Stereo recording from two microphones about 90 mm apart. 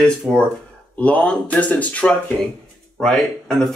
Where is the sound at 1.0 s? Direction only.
15° left (ahead or behind).